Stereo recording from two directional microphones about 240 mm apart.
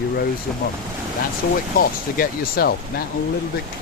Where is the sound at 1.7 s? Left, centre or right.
Left.